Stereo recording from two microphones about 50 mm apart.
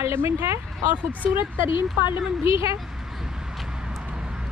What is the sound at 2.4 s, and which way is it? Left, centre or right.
Speech, right.